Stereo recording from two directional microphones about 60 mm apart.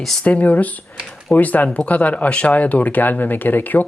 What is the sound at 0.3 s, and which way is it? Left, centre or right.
Speech, left.